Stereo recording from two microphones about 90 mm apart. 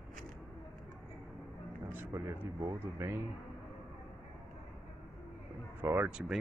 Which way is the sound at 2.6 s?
45° right (ahead or behind).